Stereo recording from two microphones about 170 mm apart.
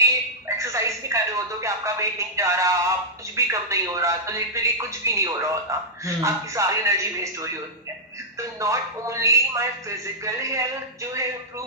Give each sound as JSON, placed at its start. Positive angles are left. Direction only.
{"t": 0.0, "sound": "music", "side_deg": -15}
{"t": 3.3, "sound": "speech", "side_deg": -15}